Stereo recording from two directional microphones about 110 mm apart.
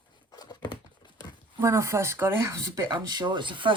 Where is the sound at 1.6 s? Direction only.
25° right (ahead or behind).